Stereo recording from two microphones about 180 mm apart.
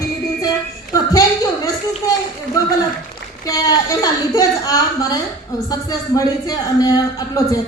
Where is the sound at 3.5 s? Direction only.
20° left (ahead or behind).